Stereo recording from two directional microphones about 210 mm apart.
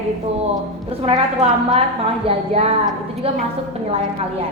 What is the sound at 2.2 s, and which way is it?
A woman's voice, 30° right (ahead or behind).